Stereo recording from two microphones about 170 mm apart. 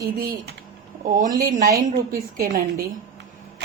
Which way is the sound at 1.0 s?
50° right (ahead or behind).